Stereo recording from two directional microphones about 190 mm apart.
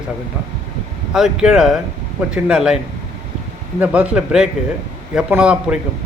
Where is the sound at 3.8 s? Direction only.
5° right (ahead or behind).